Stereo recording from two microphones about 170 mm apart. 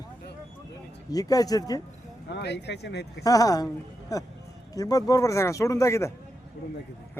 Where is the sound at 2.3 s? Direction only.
85° left.